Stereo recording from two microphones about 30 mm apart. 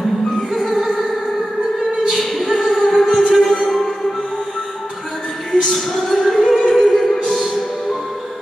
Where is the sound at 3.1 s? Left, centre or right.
Centre.